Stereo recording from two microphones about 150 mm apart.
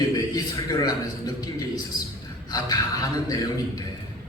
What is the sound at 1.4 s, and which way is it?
A man's voice, 25° left (ahead or behind).